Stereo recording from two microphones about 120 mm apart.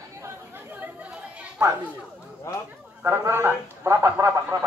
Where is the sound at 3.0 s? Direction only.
20° right (ahead or behind).